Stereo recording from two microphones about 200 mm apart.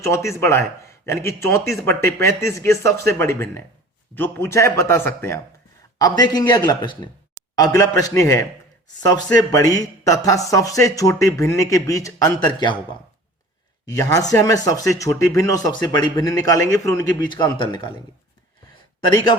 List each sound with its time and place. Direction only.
0.0 s a man's voice: 15° left (ahead or behind)
13.8 s a man's voice: 20° left (ahead or behind)